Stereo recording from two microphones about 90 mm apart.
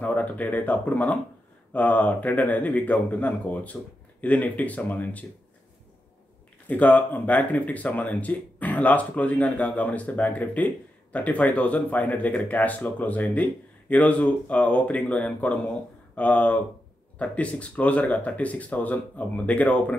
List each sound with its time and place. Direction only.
0.0 s speech: 20° left (ahead or behind)
6.7 s speech: 15° left (ahead or behind)